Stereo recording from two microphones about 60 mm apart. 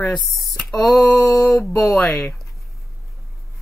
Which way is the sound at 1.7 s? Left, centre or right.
Left.